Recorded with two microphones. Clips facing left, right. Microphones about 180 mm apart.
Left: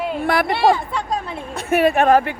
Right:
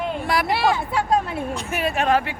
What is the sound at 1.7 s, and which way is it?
Speech, 55° left (ahead or behind).